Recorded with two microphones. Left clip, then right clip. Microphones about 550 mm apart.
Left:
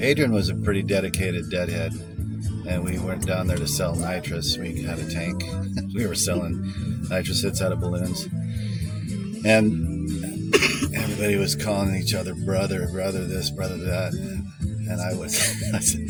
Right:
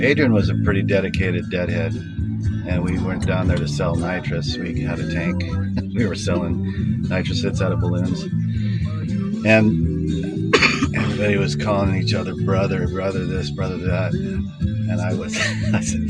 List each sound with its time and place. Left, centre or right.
0.0 s speech: left
3.3 s speech: left
5.7 s speech: left
9.4 s music: left
10.5 s cough: left
11.2 s speech: left
15.4 s speech: left